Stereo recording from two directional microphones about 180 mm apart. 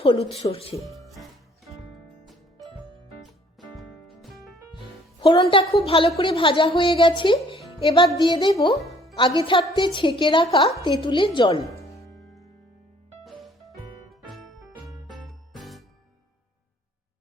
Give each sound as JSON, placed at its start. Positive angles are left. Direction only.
{"t": 0.0, "sound": "music", "side_deg": 35}
{"t": 0.8, "sound": "music", "side_deg": 0}
{"t": 3.8, "sound": "music", "side_deg": 0}
{"t": 5.2, "sound": "a woman's voice", "side_deg": 25}
{"t": 7.8, "sound": "music", "side_deg": 30}
{"t": 8.2, "sound": "a woman's voice", "side_deg": 25}
{"t": 12.1, "sound": "music", "side_deg": 0}
{"t": 14.1, "sound": "music", "side_deg": 0}
{"t": 15.5, "sound": "music", "side_deg": 0}